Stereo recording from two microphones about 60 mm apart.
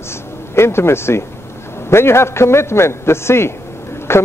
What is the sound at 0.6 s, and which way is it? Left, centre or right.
A man's voice, left.